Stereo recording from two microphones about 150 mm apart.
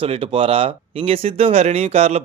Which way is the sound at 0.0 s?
35° right (ahead or behind).